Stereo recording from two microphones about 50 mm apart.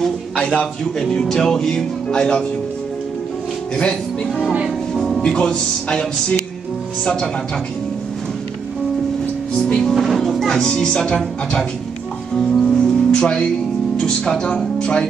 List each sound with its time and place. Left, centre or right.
0.4 s speech: centre
3.7 s speech: centre
4.9 s music: centre
5.2 s music: centre
9.6 s speech: centre
12.6 s music: centre
13.9 s speech: centre